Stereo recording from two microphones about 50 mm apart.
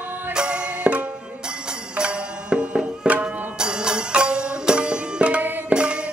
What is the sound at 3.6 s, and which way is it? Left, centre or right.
Music, centre.